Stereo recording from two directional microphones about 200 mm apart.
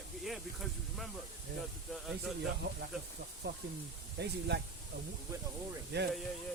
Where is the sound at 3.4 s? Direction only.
55° right (ahead or behind).